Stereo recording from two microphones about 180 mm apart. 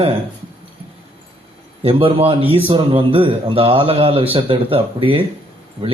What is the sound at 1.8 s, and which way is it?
A man's voice, 30° right (ahead or behind).